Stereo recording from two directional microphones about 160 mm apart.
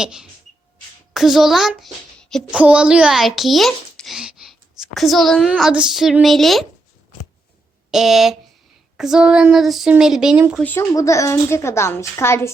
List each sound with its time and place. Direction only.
0.0 s a child's voice: 5° right (ahead or behind)
7.9 s a child's voice: centre (ahead or behind)
10.6 s a woman's voice: 15° left (ahead or behind)